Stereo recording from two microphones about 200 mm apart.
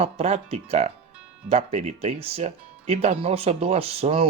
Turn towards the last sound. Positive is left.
turn(degrees=-30)  # may be behind; listen again after turning